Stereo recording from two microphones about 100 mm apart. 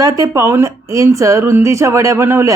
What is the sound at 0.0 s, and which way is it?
Speech, 35° right (ahead or behind).